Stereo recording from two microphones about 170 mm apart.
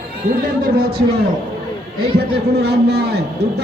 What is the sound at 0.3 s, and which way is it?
A man's voice, 60° right (ahead or behind).